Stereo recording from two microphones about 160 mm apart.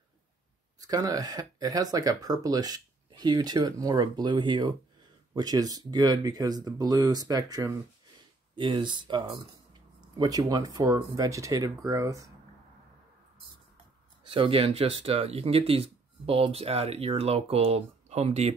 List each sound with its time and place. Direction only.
0.7 s speech: 25° right (ahead or behind)
14.3 s speech: 35° right (ahead or behind)